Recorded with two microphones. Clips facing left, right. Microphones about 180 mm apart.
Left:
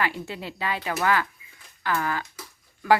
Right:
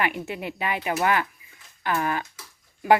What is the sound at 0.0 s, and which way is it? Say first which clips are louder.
Speech: right 2 dB; 20° right (ahead or behind).